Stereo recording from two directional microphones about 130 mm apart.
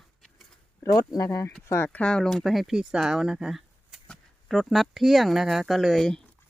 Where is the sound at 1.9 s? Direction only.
10° left (ahead or behind).